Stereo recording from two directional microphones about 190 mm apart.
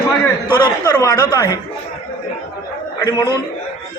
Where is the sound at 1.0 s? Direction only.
15° left (ahead or behind).